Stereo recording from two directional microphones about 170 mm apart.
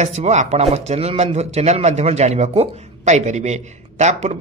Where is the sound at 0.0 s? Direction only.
40° right (ahead or behind).